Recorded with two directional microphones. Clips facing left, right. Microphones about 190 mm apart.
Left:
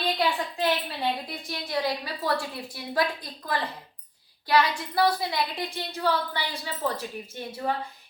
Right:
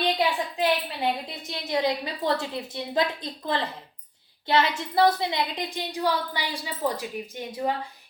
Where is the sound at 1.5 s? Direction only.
20° right (ahead or behind).